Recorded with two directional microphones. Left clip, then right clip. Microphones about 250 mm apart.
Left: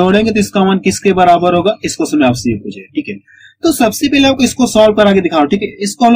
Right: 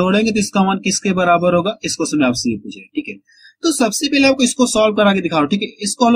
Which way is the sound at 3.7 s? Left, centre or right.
Centre.